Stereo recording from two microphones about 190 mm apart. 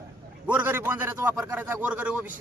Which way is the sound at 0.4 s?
10° right (ahead or behind).